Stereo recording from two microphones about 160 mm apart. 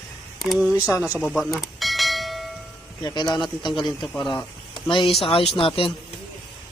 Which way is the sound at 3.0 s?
25° left (ahead or behind).